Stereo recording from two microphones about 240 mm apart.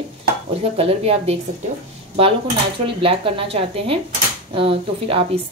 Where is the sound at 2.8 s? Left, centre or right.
Right.